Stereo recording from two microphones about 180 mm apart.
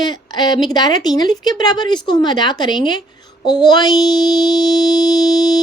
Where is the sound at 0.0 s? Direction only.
25° left (ahead or behind).